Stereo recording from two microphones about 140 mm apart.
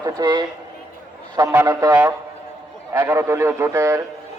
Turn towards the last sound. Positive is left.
turn(degrees=-20)  # may be behind; listen again after turning